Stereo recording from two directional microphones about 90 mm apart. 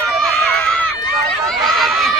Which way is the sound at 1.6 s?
Centre (ahead or behind).